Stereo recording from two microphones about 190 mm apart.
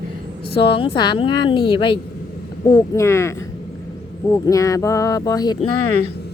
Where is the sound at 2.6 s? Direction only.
15° left (ahead or behind).